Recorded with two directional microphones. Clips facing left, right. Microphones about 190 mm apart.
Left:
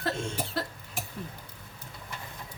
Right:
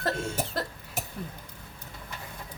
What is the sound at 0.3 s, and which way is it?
Cough, 45° right (ahead or behind).